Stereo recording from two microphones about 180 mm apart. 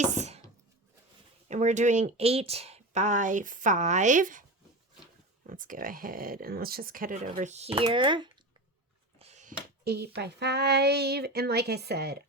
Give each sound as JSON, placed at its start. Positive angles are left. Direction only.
{"t": 0.0, "sound": "a sound", "side_deg": -40}
{"t": 1.5, "sound": "speech", "side_deg": -40}
{"t": 5.5, "sound": "speech", "side_deg": -50}
{"t": 7.8, "sound": "speech", "side_deg": -25}
{"t": 9.1, "sound": "a sound", "side_deg": -35}
{"t": 9.8, "sound": "a woman's voice", "side_deg": -65}